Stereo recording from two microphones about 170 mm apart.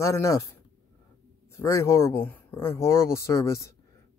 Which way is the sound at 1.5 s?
15° left (ahead or behind).